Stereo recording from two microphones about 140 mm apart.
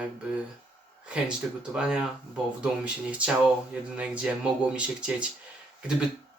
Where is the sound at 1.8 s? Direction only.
5° right (ahead or behind).